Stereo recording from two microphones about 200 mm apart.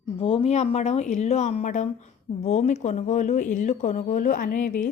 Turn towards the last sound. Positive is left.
turn(degrees=40)  # may be behind; listen again after turning